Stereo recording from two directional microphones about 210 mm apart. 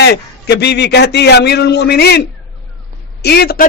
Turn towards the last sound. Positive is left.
turn(degrees=50)  # may be behind; listen again after turning